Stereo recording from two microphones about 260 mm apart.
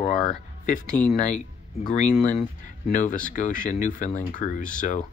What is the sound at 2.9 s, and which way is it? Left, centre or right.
Speech, left.